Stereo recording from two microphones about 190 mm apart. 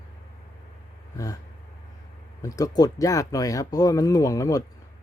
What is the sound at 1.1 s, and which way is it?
Speech, 20° left (ahead or behind).